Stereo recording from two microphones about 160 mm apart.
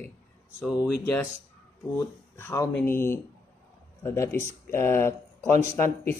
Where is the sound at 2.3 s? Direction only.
15° left (ahead or behind).